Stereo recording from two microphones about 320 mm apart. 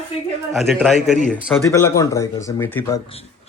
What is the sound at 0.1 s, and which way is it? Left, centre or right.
Speech, centre.